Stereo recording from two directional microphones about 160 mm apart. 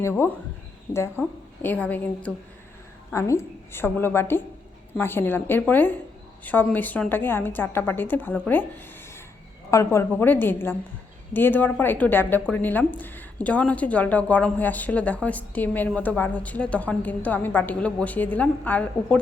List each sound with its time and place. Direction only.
0.0 s a woman's voice: 15° left (ahead or behind)
9.6 s a woman's voice: 15° left (ahead or behind)